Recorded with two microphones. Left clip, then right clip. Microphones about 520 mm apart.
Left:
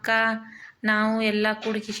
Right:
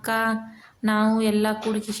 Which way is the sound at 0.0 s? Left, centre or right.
Right.